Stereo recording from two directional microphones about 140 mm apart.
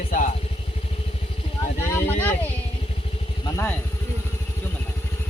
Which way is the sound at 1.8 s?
15° left (ahead or behind).